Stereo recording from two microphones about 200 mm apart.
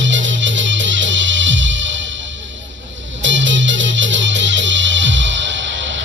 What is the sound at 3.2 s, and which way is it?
Music, 70° right (ahead or behind).